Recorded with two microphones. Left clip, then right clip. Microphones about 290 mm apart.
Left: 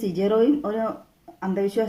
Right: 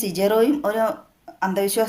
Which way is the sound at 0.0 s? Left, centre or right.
Right.